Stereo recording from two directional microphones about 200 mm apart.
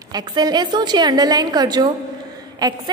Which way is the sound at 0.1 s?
20° right (ahead or behind).